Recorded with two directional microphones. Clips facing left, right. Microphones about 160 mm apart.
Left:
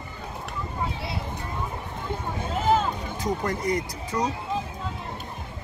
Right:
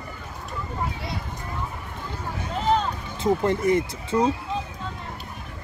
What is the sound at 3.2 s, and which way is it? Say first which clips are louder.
Speech: right 8 dB; 25° right (ahead or behind).